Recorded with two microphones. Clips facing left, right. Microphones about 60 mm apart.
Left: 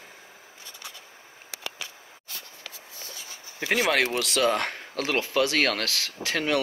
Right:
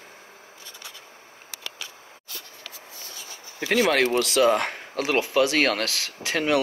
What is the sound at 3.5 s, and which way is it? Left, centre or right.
Speech, centre.